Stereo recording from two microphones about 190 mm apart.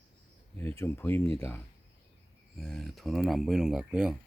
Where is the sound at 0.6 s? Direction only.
10° left (ahead or behind).